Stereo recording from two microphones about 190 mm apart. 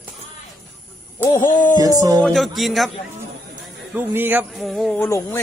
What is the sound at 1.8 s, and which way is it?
Speech, 20° right (ahead or behind).